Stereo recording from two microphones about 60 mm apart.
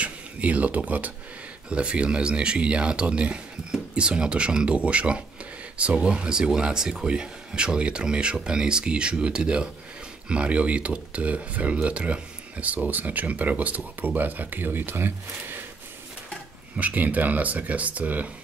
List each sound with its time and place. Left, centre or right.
0.0 s speech: right
16.7 s speech: right